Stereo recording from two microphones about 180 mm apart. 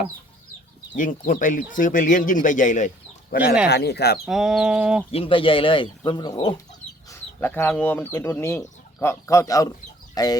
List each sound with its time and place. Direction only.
0.9 s speech: 50° left (ahead or behind)
3.7 s speech: 65° left (ahead or behind)
4.3 s chicken: centre (ahead or behind)
5.1 s speech: 30° left (ahead or behind)
7.1 s speech: 10° left (ahead or behind)